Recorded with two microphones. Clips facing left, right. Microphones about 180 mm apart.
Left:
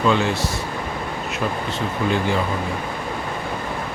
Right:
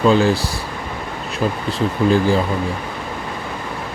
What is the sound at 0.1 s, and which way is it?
Speech, 35° right (ahead or behind).